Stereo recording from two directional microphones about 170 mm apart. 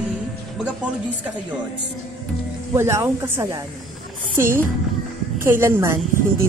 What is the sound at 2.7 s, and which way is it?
Speech, 15° right (ahead or behind).